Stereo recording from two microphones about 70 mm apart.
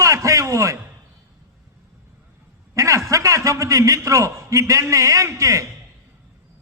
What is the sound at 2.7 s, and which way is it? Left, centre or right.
A man's voice, right.